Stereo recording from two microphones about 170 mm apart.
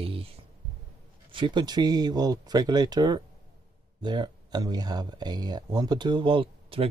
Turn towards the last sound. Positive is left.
turn(degrees=-35)  # may be behind; listen again after turning